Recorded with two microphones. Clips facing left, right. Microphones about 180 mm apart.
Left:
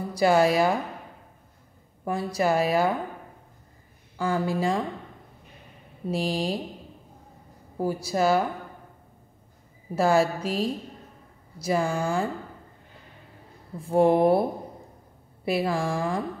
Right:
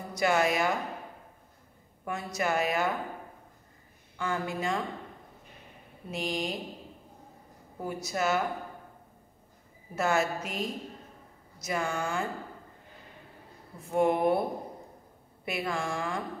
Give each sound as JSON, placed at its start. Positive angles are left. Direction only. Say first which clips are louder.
{"t": 0.1, "sound": "speech", "louder": "left 6 dB", "side_deg": 30}
{"t": 2.0, "sound": "speech", "louder": "left 7 dB", "side_deg": 30}
{"t": 4.2, "sound": "speech", "louder": "left 7 dB", "side_deg": 35}
{"t": 6.0, "sound": "speech", "louder": "left 6 dB", "side_deg": 30}
{"t": 7.8, "sound": "speech", "louder": "left 7 dB", "side_deg": 30}
{"t": 9.9, "sound": "speech", "louder": "left 6 dB", "side_deg": 30}
{"t": 13.7, "sound": "speech", "louder": "left 6 dB", "side_deg": 30}
{"t": 15.4, "sound": "speech", "louder": "left 7 dB", "side_deg": 35}